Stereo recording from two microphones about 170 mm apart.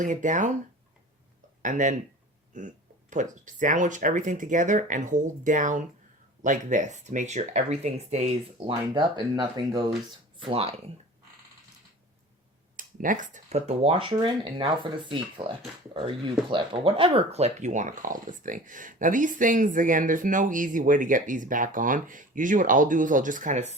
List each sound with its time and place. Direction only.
0.0 s speech: 50° right (ahead or behind)
1.6 s speech: 50° right (ahead or behind)
12.7 s speech: 50° right (ahead or behind)